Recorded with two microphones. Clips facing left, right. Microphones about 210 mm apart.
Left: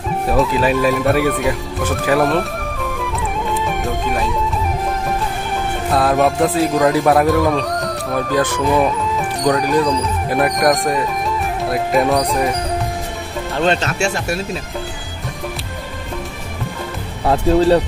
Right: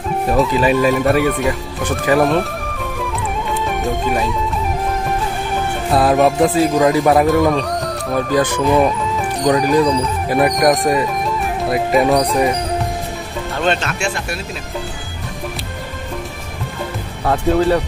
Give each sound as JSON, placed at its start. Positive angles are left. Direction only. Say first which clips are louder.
{"t": 0.3, "sound": "speech", "louder": "right 1 dB", "side_deg": 0}
{"t": 3.8, "sound": "speech", "louder": "right 2 dB", "side_deg": 0}
{"t": 5.9, "sound": "speech", "louder": "right 2 dB", "side_deg": 0}
{"t": 13.6, "sound": "speech", "louder": "left 2 dB", "side_deg": 35}